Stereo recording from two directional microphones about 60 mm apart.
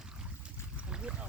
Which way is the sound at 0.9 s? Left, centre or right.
Centre.